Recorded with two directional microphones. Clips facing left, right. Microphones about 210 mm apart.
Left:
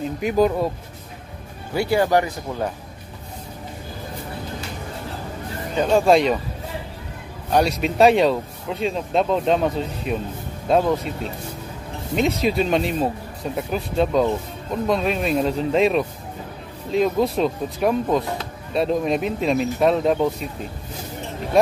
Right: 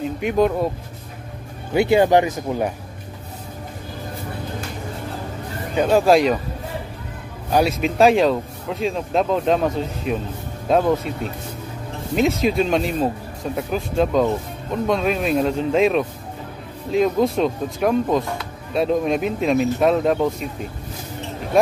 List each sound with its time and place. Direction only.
0.2 s speech: centre (ahead or behind)
1.7 s speech: 20° right (ahead or behind)
5.8 s speech: 5° right (ahead or behind)
7.5 s speech: centre (ahead or behind)
12.2 s speech: centre (ahead or behind)